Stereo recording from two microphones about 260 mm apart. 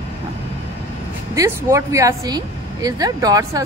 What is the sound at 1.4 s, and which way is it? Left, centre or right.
Speech, centre.